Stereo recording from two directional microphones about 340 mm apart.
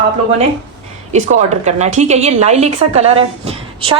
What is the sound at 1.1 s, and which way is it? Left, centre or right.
A woman's voice, right.